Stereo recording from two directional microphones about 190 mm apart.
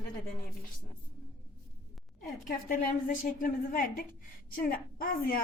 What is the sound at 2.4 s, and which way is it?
A woman's voice, 45° left (ahead or behind).